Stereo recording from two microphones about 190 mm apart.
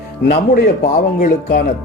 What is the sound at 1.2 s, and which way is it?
Speech, 50° left (ahead or behind).